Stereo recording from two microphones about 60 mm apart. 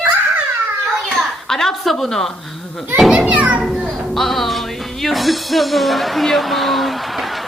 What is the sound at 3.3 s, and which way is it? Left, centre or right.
Speech, centre.